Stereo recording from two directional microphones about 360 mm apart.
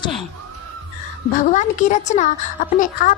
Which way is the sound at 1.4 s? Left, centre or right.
Centre.